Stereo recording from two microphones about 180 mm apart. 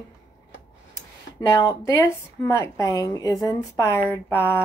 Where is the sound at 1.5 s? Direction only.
15° left (ahead or behind).